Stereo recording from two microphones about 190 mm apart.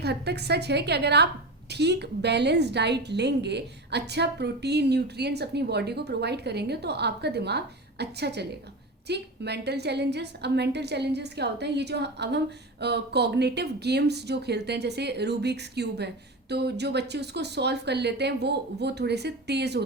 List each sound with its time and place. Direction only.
0.0 s speech: 60° right (ahead or behind)